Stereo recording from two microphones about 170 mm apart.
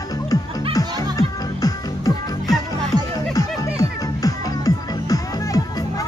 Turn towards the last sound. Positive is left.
turn(degrees=20)  # may be behind; listen again after turning